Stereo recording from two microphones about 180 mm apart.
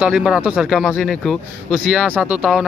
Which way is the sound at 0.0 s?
5° right (ahead or behind).